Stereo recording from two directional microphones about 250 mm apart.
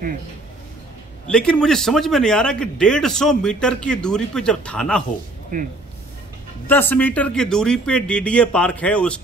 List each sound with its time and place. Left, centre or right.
1.2 s a man's voice: centre
5.5 s speech: right
6.7 s a man's voice: centre